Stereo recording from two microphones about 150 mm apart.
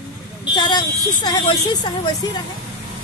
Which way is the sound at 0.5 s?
30° left (ahead or behind).